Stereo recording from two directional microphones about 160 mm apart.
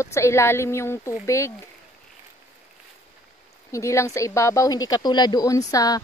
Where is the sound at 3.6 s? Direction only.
20° left (ahead or behind).